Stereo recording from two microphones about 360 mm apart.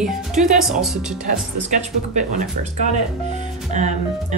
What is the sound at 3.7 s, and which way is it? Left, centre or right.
Speech, centre.